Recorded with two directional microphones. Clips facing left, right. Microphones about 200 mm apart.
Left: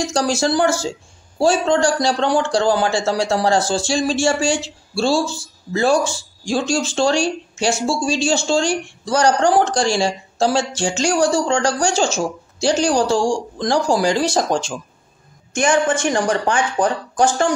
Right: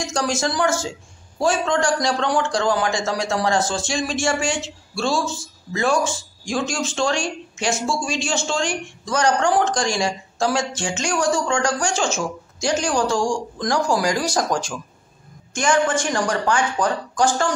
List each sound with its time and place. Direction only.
0.0 s a man's voice: 30° left (ahead or behind)
16.0 s speech: 20° left (ahead or behind)